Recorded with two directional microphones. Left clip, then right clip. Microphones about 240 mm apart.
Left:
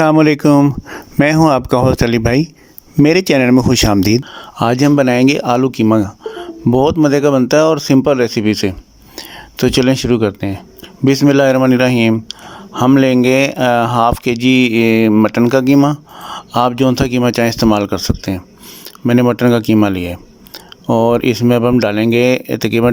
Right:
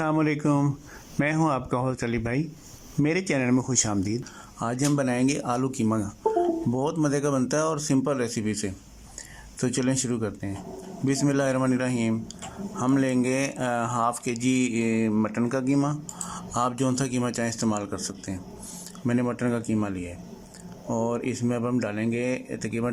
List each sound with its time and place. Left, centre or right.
0.0 s a man's voice: left